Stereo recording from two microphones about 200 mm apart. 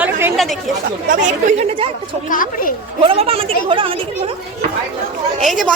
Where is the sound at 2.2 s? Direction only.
45° left (ahead or behind).